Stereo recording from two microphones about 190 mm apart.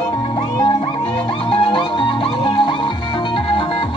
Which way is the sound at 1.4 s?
30° left (ahead or behind).